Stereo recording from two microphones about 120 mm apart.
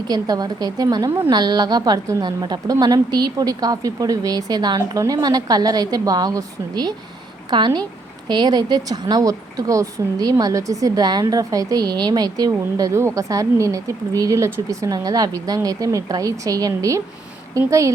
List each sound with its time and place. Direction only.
0.1 s a woman's voice: 35° right (ahead or behind)